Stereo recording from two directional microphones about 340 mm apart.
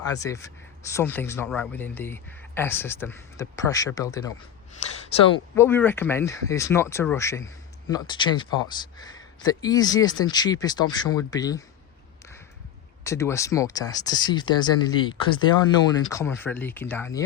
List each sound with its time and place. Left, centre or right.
0.0 s speech: centre
5.3 s speech: centre
13.1 s speech: centre